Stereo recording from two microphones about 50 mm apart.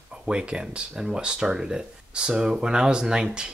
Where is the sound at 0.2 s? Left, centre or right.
Centre.